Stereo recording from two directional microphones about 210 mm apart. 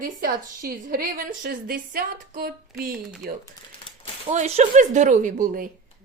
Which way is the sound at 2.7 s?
Centre (ahead or behind).